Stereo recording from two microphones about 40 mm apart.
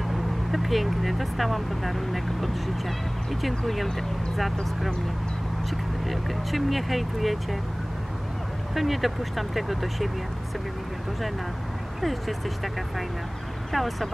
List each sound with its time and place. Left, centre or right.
0.1 s speech: centre
5.7 s speech: centre
8.7 s speech: centre
12.0 s speech: centre